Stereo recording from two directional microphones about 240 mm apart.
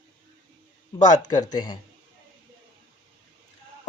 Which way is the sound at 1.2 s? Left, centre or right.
Centre.